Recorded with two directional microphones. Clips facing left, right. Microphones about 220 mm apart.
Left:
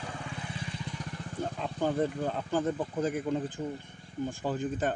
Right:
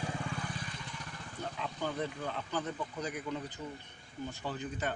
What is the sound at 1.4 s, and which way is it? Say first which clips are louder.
Speech: left 6 dB; 45° left (ahead or behind).